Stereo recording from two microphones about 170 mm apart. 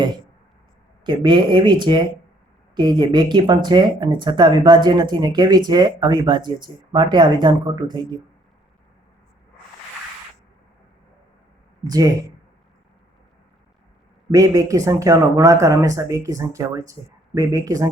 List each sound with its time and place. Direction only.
1.0 s speech: 25° right (ahead or behind)
11.9 s speech: 20° right (ahead or behind)
14.3 s speech: 20° right (ahead or behind)